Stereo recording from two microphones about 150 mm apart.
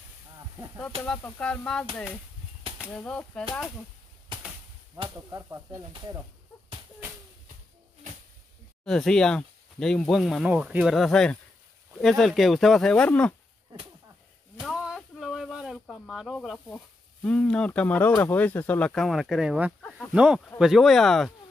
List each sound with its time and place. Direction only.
1.0 s speech: 5° left (ahead or behind)
2.9 s speech: 10° left (ahead or behind)
5.1 s speech: 20° right (ahead or behind)
8.8 s speech: 5° left (ahead or behind)
14.6 s a sound: centre (ahead or behind)
18.2 s speech: 10° left (ahead or behind); by 19.7 s 5° right (ahead or behind)
19.8 s speech: 5° left (ahead or behind)
20.1 s speech: 5° right (ahead or behind)